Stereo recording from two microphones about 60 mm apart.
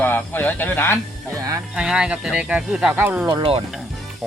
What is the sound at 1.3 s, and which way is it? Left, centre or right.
Speech, right.